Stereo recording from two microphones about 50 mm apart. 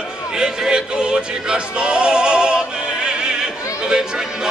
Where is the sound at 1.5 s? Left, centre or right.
Centre.